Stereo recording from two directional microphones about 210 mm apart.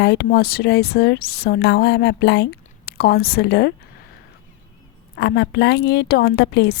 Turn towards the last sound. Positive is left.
turn(degrees=50)  # may be behind; listen again after turning